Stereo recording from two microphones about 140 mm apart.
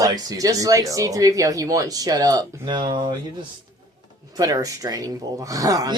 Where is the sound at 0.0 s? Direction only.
25° right (ahead or behind).